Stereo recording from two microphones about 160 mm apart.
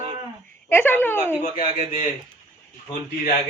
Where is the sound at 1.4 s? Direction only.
50° left (ahead or behind).